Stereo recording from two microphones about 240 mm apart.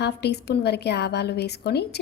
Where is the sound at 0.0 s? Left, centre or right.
Left.